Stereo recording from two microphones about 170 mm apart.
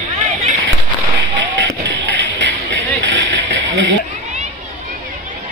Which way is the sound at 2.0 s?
90° right.